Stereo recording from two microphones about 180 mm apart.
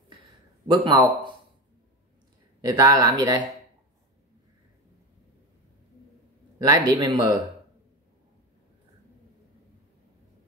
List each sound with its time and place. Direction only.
0.8 s speech: 25° right (ahead or behind)
2.6 s speech: 20° right (ahead or behind)
6.6 s speech: 20° right (ahead or behind)